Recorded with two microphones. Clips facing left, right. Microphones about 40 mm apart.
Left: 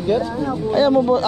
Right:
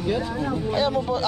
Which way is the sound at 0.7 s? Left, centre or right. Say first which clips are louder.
Left 10 dB; left.